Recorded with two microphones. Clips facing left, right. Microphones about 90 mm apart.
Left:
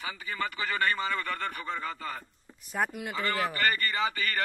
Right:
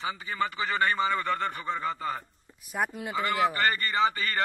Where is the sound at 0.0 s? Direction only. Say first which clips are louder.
Right 4 dB; 25° right (ahead or behind).